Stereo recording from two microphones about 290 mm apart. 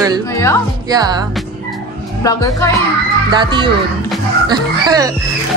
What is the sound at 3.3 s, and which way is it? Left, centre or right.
Speech, centre.